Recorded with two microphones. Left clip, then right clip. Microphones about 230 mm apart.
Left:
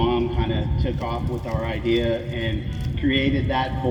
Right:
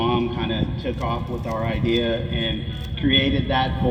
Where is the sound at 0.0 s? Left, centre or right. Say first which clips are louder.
Even; right.